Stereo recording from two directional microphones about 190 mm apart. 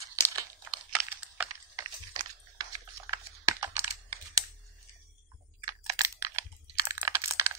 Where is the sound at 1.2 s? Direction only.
10° right (ahead or behind).